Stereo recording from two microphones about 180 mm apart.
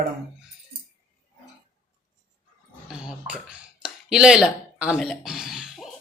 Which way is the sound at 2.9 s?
5° right (ahead or behind).